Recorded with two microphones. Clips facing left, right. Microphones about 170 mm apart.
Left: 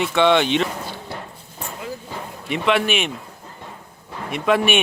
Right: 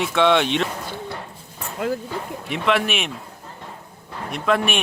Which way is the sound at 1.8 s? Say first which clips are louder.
Right 9 dB; 65° right (ahead or behind).